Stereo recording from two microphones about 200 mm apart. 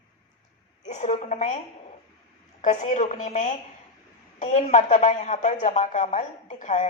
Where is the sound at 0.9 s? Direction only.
35° left (ahead or behind).